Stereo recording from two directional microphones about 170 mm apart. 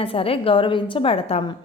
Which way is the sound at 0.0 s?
35° left (ahead or behind).